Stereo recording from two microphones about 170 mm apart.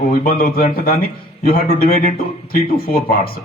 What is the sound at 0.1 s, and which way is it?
A man's voice, 55° left (ahead or behind).